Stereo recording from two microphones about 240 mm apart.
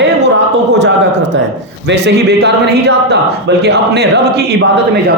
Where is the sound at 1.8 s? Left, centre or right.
Right.